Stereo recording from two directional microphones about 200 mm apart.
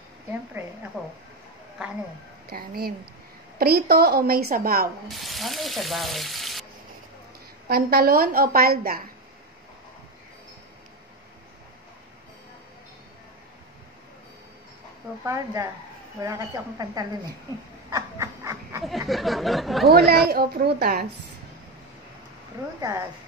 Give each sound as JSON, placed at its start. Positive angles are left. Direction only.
{"t": 2.5, "sound": "a sound", "side_deg": -50}
{"t": 3.5, "sound": "a woman's voice", "side_deg": -50}
{"t": 5.0, "sound": "speech", "side_deg": 0}
{"t": 7.6, "sound": "a woman's voice", "side_deg": -50}
{"t": 15.2, "sound": "a woman's voice", "side_deg": -15}
{"t": 17.8, "sound": "a sound", "side_deg": -15}
{"t": 18.9, "sound": "speech", "side_deg": 0}
{"t": 19.9, "sound": "a woman's voice", "side_deg": -50}
{"t": 22.8, "sound": "speech", "side_deg": -20}